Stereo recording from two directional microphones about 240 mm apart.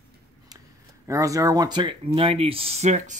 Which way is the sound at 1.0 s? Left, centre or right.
Centre.